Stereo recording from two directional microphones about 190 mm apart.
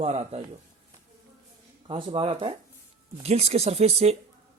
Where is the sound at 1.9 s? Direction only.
25° right (ahead or behind).